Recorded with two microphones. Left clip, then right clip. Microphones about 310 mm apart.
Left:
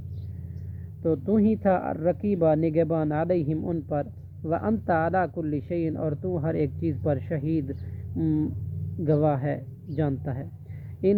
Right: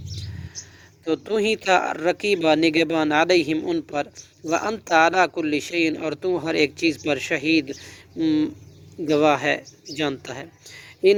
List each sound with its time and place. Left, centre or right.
1.0 s speech: right